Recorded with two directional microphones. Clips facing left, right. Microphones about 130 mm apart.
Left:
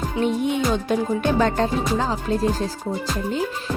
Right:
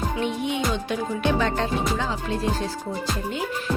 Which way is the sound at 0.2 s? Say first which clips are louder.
Left 7 dB; 45° left (ahead or behind).